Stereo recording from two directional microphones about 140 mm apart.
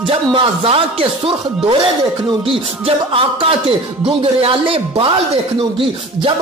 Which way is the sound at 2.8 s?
40° right (ahead or behind).